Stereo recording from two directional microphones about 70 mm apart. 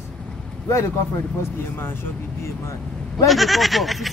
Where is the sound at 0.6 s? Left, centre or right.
Left.